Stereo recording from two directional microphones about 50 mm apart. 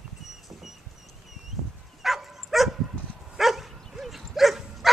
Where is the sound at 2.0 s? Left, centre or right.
Centre.